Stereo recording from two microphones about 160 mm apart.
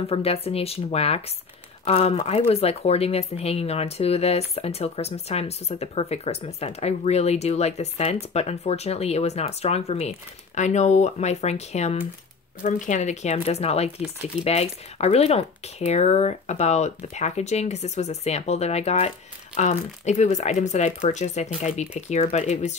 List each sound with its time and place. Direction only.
0.1 s speech: 40° left (ahead or behind)